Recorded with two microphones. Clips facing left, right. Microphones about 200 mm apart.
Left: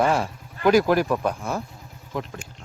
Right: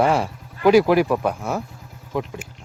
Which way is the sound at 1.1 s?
65° right (ahead or behind).